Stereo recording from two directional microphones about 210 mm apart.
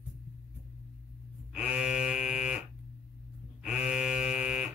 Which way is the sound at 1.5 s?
5° right (ahead or behind).